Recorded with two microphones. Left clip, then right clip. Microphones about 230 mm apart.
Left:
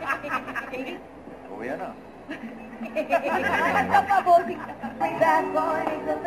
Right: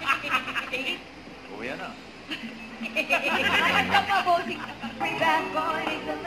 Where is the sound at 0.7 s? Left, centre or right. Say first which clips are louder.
Right 4 dB; left.